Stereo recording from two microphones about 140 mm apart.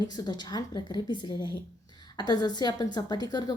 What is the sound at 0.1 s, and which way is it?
A woman's voice, 30° left (ahead or behind).